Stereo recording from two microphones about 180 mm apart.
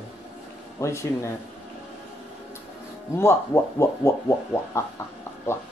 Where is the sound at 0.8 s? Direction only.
15° left (ahead or behind).